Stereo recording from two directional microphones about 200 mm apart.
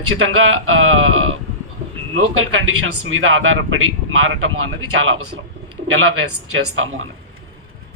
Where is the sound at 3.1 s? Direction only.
90° right.